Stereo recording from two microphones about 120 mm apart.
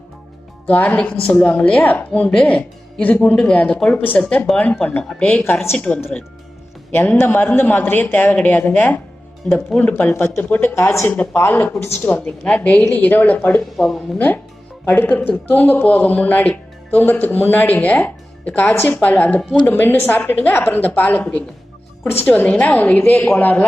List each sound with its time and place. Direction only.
0.7 s speech: 10° left (ahead or behind)
5.4 s speech: 20° left (ahead or behind)
13.7 s speech: 5° left (ahead or behind)
14.8 s speech: 15° left (ahead or behind)